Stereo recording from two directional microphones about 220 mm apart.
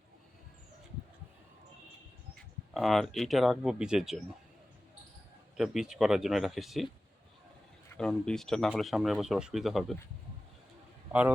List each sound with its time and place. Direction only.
2.7 s speech: centre (ahead or behind)
5.5 s speech: centre (ahead or behind)
7.9 s speech: 5° left (ahead or behind)